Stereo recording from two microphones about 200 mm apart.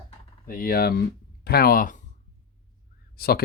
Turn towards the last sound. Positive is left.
turn(degrees=50)  # may be behind; listen again after turning